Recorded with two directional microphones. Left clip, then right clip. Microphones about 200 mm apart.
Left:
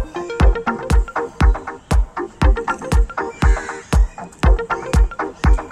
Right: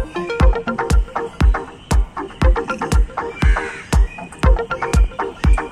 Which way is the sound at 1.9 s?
Centre (ahead or behind).